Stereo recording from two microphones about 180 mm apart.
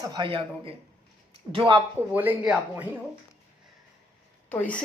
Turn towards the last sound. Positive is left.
turn(degrees=10)  # may be behind; listen again after turning